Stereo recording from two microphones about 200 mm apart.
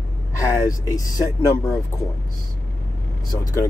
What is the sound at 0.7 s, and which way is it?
Speech, 15° left (ahead or behind).